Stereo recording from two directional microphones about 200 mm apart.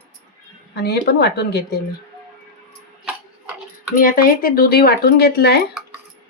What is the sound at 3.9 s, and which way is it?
Speech, 45° left (ahead or behind).